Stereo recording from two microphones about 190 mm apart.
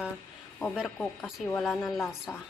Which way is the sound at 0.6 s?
5° left (ahead or behind).